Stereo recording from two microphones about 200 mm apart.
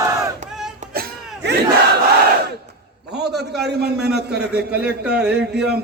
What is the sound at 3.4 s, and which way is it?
Speech, 55° right (ahead or behind).